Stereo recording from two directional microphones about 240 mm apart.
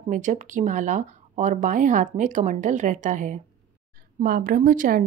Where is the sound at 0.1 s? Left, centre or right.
Right.